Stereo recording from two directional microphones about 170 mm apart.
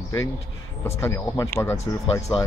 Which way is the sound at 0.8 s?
15° left (ahead or behind).